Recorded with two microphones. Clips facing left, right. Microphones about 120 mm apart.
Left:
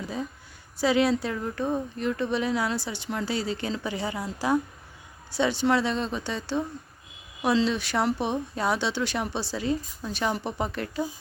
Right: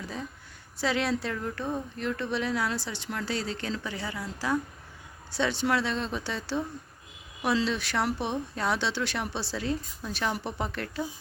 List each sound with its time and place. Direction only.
0.8 s speech: 5° left (ahead or behind)
5.3 s speech: centre (ahead or behind)